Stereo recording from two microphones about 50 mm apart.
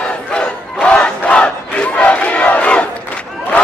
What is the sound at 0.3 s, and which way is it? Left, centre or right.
Battle cry, left.